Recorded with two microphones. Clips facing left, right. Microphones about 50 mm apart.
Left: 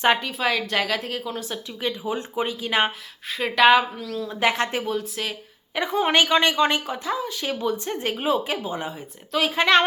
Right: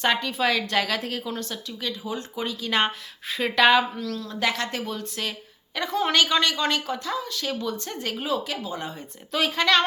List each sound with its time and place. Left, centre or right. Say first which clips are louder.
0.0 s a woman's voice: left 3 dB; centre
0.3 s a woman's voice: even; centre
3.2 s a woman's voice: left 2 dB; centre
4.3 s a woman's voice: left 5 dB; left
4.9 s a woman's voice: left 4 dB; centre
5.7 s a woman's voice: left 2 dB; left
8.9 s a woman's voice: left 3 dB; centre
9.6 s a woman's voice: left 3 dB; left